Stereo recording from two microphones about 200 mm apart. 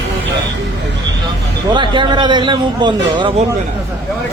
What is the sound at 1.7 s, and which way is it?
A man's voice, 25° right (ahead or behind).